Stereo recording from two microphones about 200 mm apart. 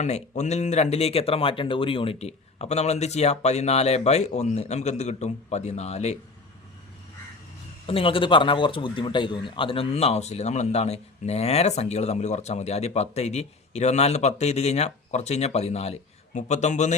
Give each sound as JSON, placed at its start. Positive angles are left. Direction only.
{"t": 0.0, "sound": "a man's voice", "side_deg": 35}
{"t": 7.9, "sound": "a man's voice", "side_deg": 25}